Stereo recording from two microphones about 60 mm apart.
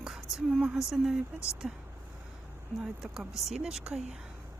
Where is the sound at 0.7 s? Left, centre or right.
Centre.